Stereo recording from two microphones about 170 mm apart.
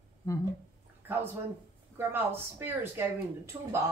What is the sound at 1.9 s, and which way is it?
Speech, 10° right (ahead or behind).